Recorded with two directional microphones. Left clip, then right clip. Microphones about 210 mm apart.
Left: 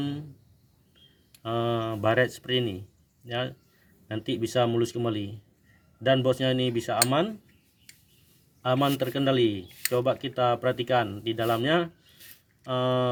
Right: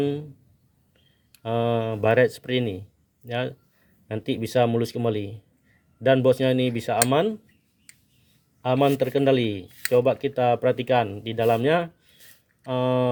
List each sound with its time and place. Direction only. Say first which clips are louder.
1.4 s speech: right 4 dB; 35° right (ahead or behind)
8.6 s speech: right 4 dB; 35° right (ahead or behind)